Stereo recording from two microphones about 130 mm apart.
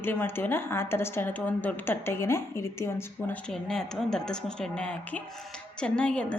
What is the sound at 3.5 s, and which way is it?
A woman's voice, 5° left (ahead or behind).